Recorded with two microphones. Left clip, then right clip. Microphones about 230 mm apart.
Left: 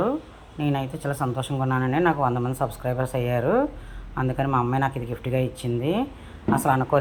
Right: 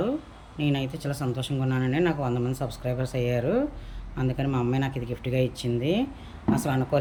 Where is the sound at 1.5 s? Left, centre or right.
Left.